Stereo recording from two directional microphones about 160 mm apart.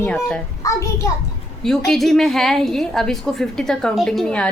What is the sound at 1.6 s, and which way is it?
A woman's voice, centre (ahead or behind).